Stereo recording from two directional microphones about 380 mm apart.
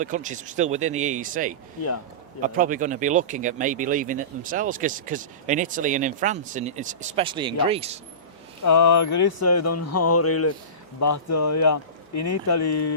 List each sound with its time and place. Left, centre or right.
0.0 s speech: centre
8.6 s speech: left